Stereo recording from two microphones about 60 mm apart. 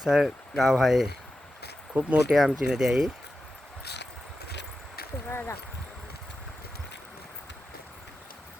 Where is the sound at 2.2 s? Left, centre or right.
Centre.